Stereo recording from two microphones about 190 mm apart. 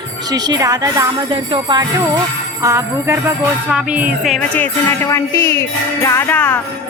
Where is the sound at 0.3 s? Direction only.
20° right (ahead or behind).